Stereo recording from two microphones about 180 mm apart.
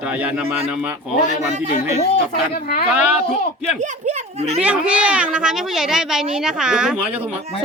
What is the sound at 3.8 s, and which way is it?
Speech, 40° right (ahead or behind).